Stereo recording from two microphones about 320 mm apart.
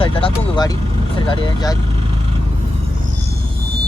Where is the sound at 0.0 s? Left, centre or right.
Centre.